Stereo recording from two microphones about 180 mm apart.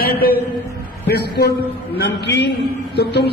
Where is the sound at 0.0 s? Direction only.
55° left (ahead or behind).